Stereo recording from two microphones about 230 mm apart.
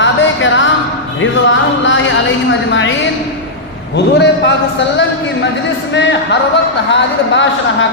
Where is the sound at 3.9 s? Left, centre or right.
Left.